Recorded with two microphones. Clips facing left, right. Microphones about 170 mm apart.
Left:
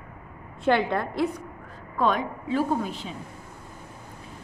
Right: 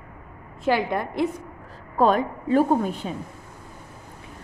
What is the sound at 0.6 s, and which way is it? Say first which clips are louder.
Speech: even; 5° right (ahead or behind).